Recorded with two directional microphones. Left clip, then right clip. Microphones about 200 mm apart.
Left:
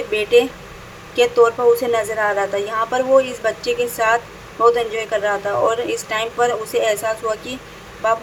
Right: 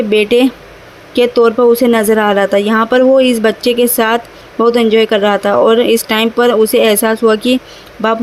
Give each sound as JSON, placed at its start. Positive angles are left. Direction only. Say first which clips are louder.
{"t": 0.1, "sound": "a woman's voice", "louder": "right 4 dB", "side_deg": -50}